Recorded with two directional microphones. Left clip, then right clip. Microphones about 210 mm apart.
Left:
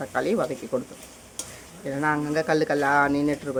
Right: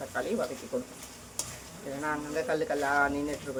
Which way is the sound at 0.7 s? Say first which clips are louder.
Left 6 dB; 55° left (ahead or behind).